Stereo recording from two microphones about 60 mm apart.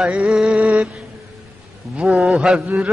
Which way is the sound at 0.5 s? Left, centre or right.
Right.